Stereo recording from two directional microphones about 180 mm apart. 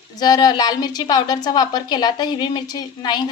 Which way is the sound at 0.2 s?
25° left (ahead or behind).